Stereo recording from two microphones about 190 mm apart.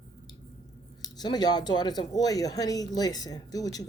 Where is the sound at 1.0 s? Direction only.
20° left (ahead or behind).